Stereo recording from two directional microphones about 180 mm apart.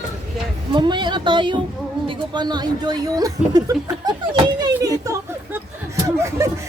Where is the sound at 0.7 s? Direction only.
25° right (ahead or behind).